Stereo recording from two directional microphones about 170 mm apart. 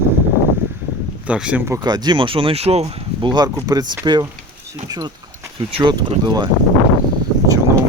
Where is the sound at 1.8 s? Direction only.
25° right (ahead or behind).